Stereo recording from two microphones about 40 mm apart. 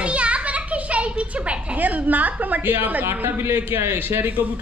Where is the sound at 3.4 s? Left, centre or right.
Right.